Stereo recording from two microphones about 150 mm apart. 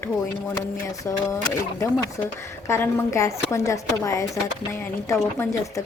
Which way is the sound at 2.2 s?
15° left (ahead or behind).